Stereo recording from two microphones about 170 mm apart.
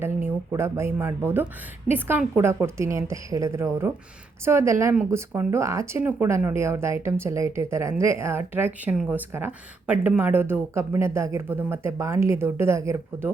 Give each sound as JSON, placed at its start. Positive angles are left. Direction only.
{"t": 0.5, "sound": "speech", "side_deg": -15}